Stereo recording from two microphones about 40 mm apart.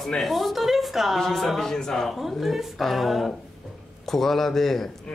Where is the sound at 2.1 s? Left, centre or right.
Centre.